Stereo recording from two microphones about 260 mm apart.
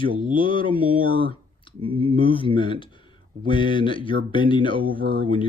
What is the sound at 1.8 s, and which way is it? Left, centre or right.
Speech, centre.